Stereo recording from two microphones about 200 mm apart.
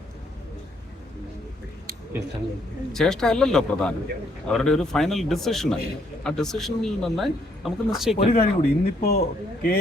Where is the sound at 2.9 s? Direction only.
Centre (ahead or behind).